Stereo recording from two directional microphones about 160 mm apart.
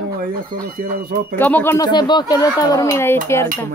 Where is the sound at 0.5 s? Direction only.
65° right (ahead or behind).